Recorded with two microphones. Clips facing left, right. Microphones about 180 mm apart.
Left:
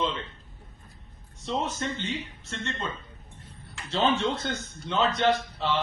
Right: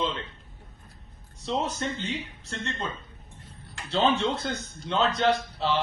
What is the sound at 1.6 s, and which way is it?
Speech, 35° right (ahead or behind).